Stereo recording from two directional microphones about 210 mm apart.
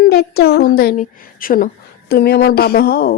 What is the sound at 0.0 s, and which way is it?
A child's voice, 50° left (ahead or behind).